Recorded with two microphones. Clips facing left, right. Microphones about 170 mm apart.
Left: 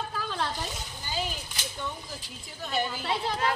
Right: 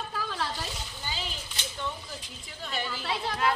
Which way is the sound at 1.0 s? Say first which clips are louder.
Left 5 dB; 50° left (ahead or behind).